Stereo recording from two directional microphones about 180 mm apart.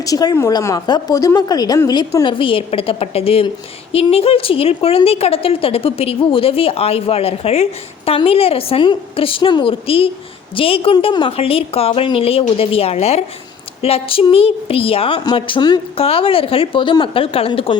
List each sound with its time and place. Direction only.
0.0 s a woman's voice: 20° left (ahead or behind)